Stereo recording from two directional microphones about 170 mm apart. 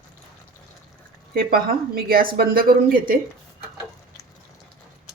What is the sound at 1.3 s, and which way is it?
A woman's voice, 60° right (ahead or behind).